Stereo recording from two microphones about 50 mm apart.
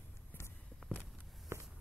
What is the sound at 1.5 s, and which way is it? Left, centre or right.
Walk, right.